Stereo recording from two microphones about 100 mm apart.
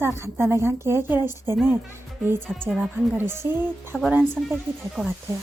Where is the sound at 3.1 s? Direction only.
25° right (ahead or behind).